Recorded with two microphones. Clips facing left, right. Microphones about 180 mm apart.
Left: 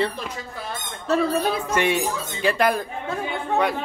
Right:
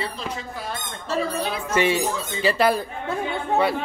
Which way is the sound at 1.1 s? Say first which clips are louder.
Left 4 dB; 55° left (ahead or behind).